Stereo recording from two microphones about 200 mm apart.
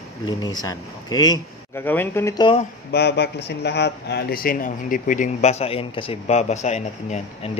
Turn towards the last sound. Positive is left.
turn(degrees=35)  # may be behind; listen again after turning